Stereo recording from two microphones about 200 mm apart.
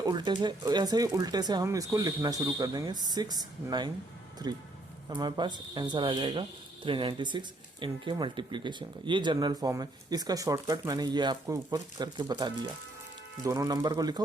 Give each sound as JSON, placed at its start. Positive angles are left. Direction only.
{"t": 0.0, "sound": "speech", "side_deg": -20}